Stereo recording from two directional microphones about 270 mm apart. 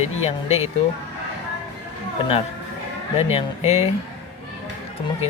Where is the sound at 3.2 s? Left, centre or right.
Left.